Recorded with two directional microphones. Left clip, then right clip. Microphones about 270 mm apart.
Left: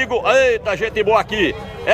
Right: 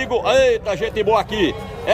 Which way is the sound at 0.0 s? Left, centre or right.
Centre.